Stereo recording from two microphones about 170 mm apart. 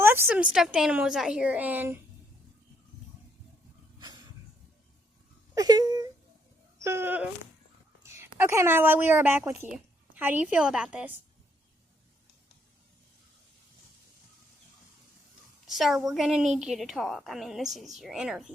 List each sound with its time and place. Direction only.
0.0 s a woman's voice: 15° right (ahead or behind)
5.5 s speech: 25° right (ahead or behind)
8.0 s a sound: 15° right (ahead or behind)
8.4 s a woman's voice: 15° right (ahead or behind)
15.6 s a woman's voice: centre (ahead or behind)